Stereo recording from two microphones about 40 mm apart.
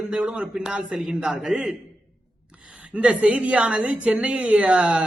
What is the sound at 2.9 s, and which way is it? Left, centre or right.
A woman's voice, right.